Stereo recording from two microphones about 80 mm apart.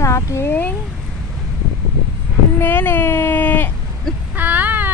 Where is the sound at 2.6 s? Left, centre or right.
Left.